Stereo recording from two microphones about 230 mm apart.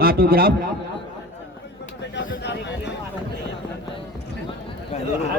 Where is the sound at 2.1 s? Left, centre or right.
Left.